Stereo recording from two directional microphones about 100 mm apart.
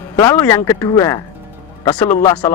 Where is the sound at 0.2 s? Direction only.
25° left (ahead or behind).